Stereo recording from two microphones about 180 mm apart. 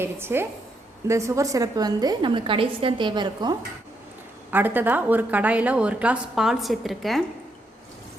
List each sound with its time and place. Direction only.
0.0 s a woman's voice: 15° right (ahead or behind)
4.5 s a woman's voice: 10° right (ahead or behind)